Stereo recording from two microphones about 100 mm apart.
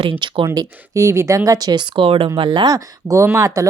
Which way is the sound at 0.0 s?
60° right (ahead or behind).